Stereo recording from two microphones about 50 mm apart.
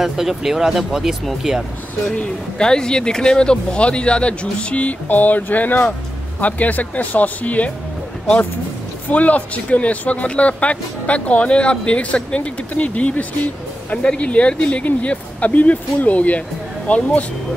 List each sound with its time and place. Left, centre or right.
0.0 s speech: centre
2.0 s speech: centre
5.0 s speech: left
9.1 s speech: left